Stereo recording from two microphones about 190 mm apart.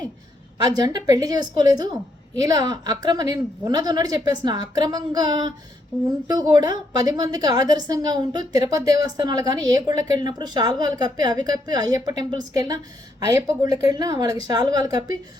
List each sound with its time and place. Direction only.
0.6 s a woman's voice: 20° right (ahead or behind)